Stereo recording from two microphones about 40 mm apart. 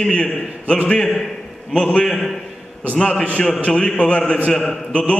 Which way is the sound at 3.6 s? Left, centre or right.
Left.